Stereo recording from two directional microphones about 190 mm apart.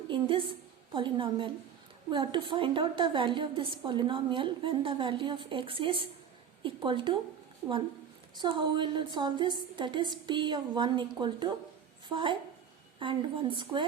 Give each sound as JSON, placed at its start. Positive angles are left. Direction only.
{"t": 0.1, "sound": "a woman's voice", "side_deg": -25}
{"t": 8.4, "sound": "a woman's voice", "side_deg": -25}